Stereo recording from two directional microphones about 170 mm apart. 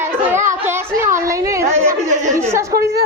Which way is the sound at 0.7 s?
15° right (ahead or behind).